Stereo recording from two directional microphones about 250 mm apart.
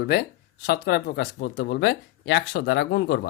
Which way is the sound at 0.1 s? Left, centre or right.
Left.